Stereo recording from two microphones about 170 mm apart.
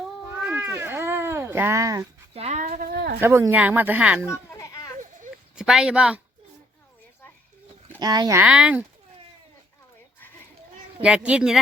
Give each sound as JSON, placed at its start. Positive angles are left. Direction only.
{"t": 0.3, "sound": "cat", "side_deg": -10}
{"t": 2.3, "sound": "a sound", "side_deg": -40}
{"t": 3.2, "sound": "speech", "side_deg": -15}
{"t": 4.3, "sound": "children playing", "side_deg": 20}
{"t": 5.5, "sound": "speech", "side_deg": -5}
{"t": 7.9, "sound": "speech", "side_deg": -25}
{"t": 8.4, "sound": "speech", "side_deg": -5}
{"t": 11.0, "sound": "speech", "side_deg": -5}